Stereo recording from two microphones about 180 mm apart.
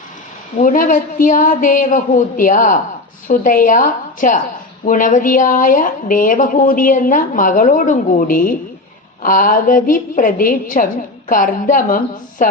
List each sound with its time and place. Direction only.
0.6 s speech: 45° left (ahead or behind)